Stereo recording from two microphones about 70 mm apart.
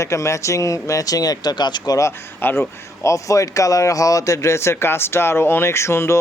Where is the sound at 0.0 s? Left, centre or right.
Left.